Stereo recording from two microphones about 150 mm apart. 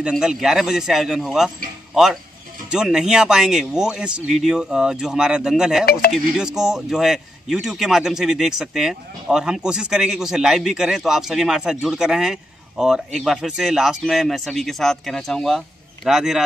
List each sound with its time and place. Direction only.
0.0 s a man's voice: 5° right (ahead or behind)
5.9 s speech: 90° left
6.1 s a man's voice: 5° right (ahead or behind)